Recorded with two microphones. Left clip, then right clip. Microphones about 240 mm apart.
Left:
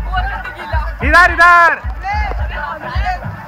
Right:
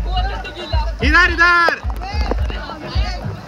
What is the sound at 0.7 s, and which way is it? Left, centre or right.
Music, centre.